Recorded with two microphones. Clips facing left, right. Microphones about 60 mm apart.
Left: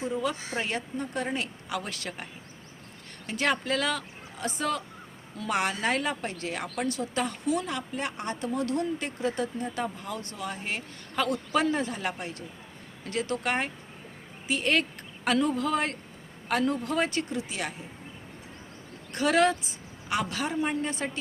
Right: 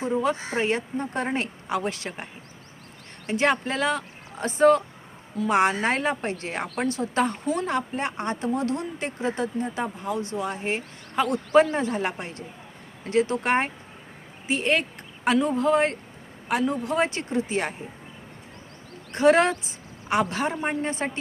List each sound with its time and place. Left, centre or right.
0.0 s a woman's voice: right
3.2 s a woman's voice: right
16.5 s a woman's voice: centre; by 17.7 s right
19.1 s a woman's voice: right